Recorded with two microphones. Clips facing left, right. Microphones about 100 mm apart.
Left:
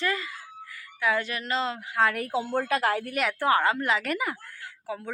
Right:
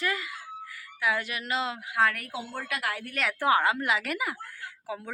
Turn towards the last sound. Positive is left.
turn(degrees=-15)  # may be behind; listen again after turning